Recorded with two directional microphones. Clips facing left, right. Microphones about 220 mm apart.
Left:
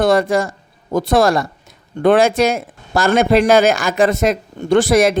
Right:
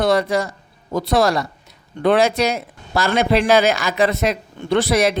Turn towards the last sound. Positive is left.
turn(degrees=50)  # may be behind; listen again after turning